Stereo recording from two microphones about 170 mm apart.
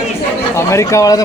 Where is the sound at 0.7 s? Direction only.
20° left (ahead or behind).